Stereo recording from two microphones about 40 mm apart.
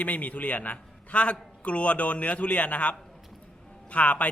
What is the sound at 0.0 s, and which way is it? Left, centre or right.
A man's voice, left.